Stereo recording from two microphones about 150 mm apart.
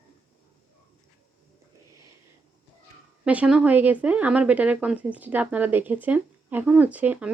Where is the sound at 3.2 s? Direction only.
5° right (ahead or behind).